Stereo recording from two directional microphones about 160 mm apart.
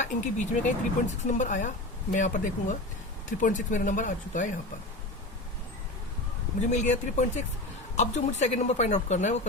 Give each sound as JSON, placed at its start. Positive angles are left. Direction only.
{"t": 0.0, "sound": "speech", "side_deg": 50}
{"t": 6.6, "sound": "speech", "side_deg": 50}